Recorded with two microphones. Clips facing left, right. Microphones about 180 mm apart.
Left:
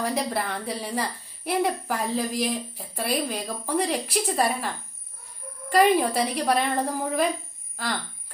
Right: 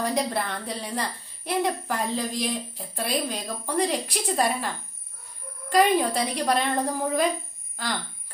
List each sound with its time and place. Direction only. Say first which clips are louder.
0.0 s a child's voice: right 1 dB; 5° left (ahead or behind)